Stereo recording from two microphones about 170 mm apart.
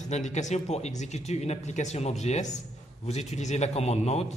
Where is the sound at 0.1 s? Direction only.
45° left (ahead or behind).